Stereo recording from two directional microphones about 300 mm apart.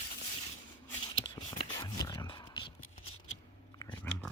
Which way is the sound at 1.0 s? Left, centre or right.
Left.